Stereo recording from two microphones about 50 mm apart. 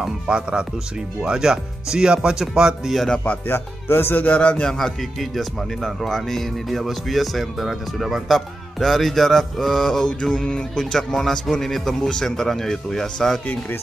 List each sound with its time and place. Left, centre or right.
0.3 s speech: centre
3.4 s speech: left
4.3 s a man's voice: left
4.6 s speech: centre